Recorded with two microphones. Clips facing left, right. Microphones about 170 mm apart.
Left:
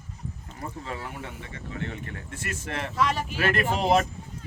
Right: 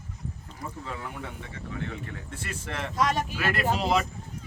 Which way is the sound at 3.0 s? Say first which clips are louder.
Even; 45° right (ahead or behind).